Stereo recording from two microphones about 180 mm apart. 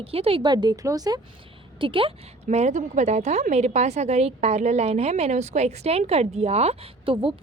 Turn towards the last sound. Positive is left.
turn(degrees=-30)  # may be behind; listen again after turning